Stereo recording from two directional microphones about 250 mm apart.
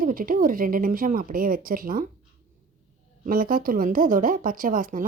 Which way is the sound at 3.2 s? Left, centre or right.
Right.